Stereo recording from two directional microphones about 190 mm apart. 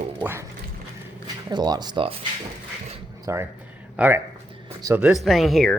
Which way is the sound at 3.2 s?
15° right (ahead or behind).